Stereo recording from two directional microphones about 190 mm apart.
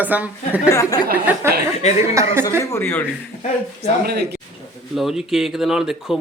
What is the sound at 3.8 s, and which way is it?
Speech, 60° right (ahead or behind).